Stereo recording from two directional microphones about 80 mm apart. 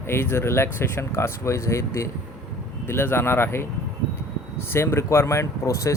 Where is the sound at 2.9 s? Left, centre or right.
Left.